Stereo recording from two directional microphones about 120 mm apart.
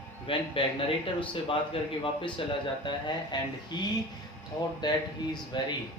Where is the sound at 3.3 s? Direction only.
35° left (ahead or behind).